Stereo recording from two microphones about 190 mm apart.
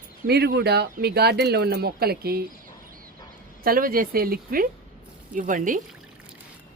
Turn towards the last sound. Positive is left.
turn(degrees=-45)  # may be behind; listen again after turning